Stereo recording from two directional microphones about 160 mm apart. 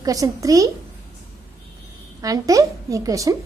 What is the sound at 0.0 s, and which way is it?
Speech, 20° right (ahead or behind).